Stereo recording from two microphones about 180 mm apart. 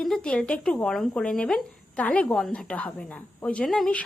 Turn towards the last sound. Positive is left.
turn(degrees=0)  # may be behind; listen again after turning